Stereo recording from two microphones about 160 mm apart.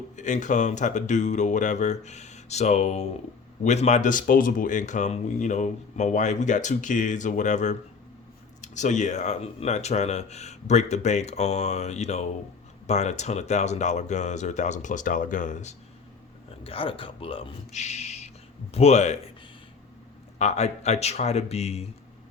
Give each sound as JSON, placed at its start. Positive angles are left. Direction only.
{"t": 0.2, "sound": "speech", "side_deg": 50}
{"t": 16.6, "sound": "speech", "side_deg": 35}
{"t": 20.4, "sound": "speech", "side_deg": 45}